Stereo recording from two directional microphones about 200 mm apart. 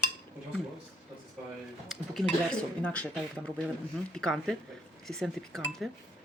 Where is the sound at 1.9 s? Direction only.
Centre (ahead or behind).